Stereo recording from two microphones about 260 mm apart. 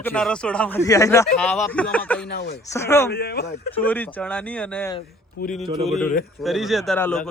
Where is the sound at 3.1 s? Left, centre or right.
Left.